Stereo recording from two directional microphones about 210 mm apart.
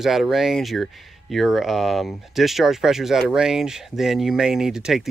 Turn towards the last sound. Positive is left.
turn(degrees=-5)  # may be behind; listen again after turning